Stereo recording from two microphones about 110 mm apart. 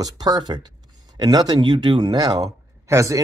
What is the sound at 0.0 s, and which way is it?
Speech, 40° right (ahead or behind).